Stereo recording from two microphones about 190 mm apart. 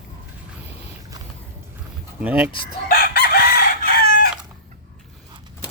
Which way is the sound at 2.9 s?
55° left (ahead or behind).